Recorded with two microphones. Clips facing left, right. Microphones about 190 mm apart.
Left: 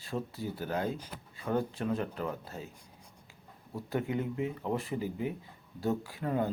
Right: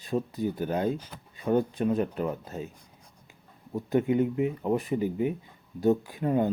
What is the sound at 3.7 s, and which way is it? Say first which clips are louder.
Speech: right 8 dB; 20° right (ahead or behind).